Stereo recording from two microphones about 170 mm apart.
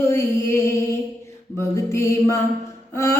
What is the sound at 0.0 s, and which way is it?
Music, 15° left (ahead or behind).